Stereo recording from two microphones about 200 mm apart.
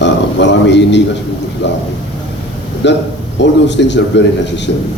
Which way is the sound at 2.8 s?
60° left (ahead or behind).